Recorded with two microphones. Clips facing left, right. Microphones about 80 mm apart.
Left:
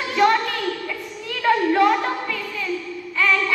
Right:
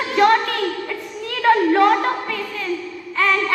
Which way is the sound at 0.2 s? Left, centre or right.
Right.